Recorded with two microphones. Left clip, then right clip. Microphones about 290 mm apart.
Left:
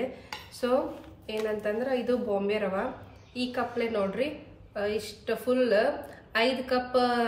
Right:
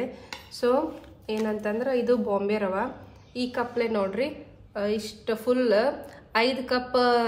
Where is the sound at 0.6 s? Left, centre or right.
Centre.